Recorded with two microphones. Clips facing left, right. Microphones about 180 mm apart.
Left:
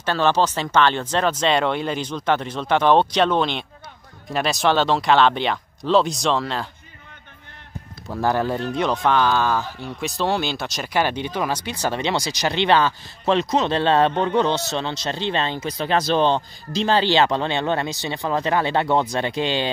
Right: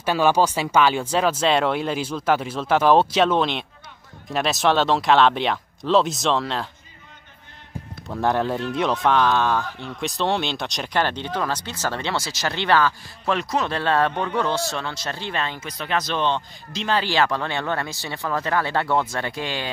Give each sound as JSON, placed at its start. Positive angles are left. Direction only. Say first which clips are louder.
{"t": 0.0, "sound": "speech", "louder": "right 1 dB", "side_deg": -10}
{"t": 8.1, "sound": "speech", "louder": "left 1 dB", "side_deg": 0}